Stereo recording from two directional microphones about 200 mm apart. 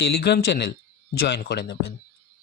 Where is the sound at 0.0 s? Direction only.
55° left (ahead or behind).